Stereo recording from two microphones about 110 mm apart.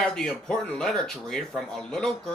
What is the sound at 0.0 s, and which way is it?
Speech, 5° left (ahead or behind).